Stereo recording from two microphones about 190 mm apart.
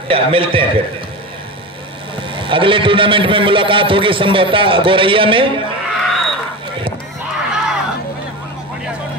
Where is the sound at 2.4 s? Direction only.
25° right (ahead or behind).